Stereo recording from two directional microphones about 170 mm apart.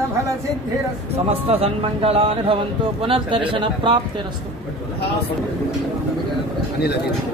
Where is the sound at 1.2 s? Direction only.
35° right (ahead or behind).